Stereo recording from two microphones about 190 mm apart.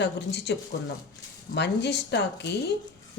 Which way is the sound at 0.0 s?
65° left (ahead or behind).